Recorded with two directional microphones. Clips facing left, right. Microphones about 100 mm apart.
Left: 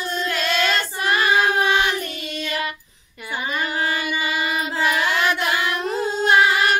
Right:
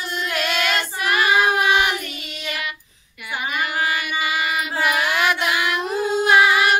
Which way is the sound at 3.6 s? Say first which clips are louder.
Right 1 dB; 35° left (ahead or behind).